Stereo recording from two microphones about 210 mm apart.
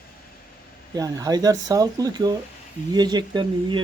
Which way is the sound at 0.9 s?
15° right (ahead or behind).